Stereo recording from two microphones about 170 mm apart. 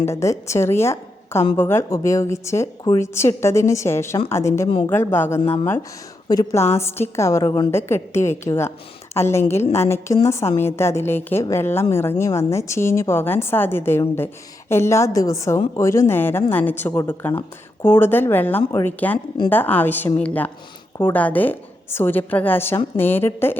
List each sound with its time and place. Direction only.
0.0 s a woman's voice: 15° left (ahead or behind)